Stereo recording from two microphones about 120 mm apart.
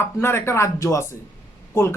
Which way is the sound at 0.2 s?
20° left (ahead or behind).